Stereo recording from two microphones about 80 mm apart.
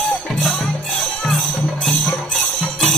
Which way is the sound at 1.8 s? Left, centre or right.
Centre.